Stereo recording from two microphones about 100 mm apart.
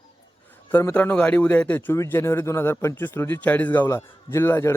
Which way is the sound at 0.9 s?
10° left (ahead or behind).